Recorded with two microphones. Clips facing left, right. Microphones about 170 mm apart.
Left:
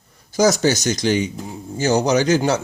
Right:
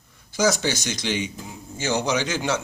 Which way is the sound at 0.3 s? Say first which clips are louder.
Left 6 dB; 40° left (ahead or behind).